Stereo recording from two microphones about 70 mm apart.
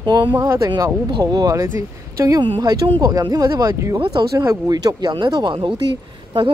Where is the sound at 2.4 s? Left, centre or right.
Right.